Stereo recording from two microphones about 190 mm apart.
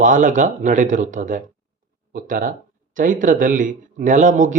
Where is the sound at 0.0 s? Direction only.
45° right (ahead or behind).